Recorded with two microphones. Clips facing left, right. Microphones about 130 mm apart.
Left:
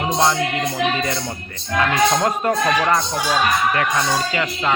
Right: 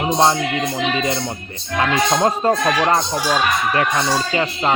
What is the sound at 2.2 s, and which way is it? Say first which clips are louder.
Speech: right 2 dB; 25° right (ahead or behind).